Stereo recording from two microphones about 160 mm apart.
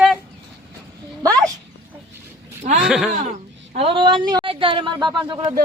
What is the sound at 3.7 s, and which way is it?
Speech, 35° right (ahead or behind).